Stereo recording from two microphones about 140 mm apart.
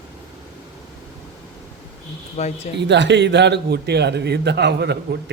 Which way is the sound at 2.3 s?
50° left (ahead or behind).